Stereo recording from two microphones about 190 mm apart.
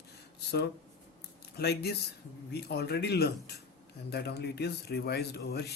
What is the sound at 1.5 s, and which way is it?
Speech, 60° left (ahead or behind).